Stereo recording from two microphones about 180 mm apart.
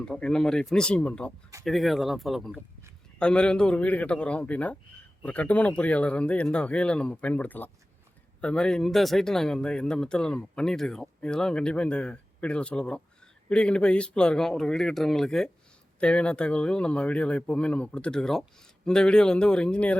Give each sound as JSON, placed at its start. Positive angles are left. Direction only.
{"t": 0.0, "sound": "speech", "side_deg": 5}